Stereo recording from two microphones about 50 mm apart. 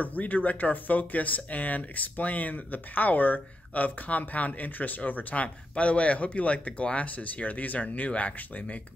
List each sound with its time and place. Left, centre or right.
0.0 s speech: left